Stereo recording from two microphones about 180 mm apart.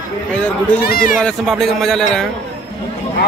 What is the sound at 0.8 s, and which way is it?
Speech, 55° left (ahead or behind).